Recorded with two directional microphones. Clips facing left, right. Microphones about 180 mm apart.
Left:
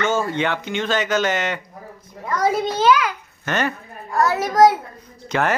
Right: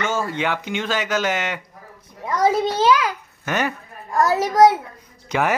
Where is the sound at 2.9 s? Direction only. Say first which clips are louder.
Left 3 dB; 35° right (ahead or behind).